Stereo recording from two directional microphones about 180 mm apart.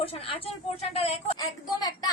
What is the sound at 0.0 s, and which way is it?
Speech, 35° left (ahead or behind).